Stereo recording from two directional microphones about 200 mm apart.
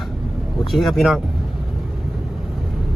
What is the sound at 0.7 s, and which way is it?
Speech, centre (ahead or behind).